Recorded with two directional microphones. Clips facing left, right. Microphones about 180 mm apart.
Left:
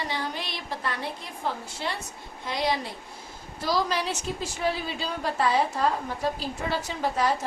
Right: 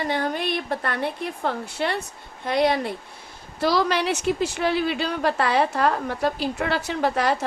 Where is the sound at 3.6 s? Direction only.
70° right (ahead or behind).